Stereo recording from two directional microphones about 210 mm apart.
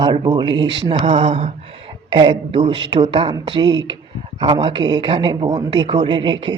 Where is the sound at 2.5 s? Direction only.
25° right (ahead or behind).